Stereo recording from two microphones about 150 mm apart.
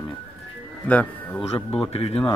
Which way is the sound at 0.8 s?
10° left (ahead or behind).